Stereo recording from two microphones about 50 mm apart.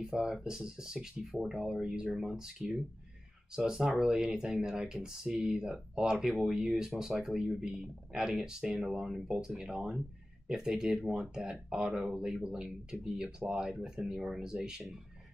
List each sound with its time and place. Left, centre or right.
0.0 s speech: centre